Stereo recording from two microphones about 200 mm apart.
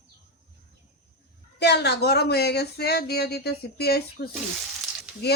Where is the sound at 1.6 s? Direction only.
55° left (ahead or behind).